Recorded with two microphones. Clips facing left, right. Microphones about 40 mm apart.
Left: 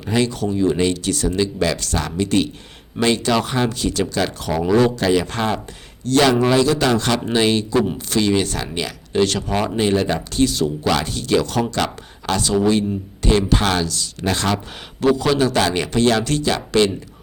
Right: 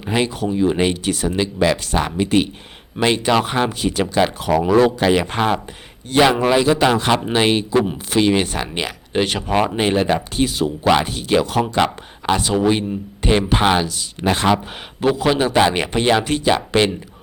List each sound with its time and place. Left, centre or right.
0.1 s a man's voice: right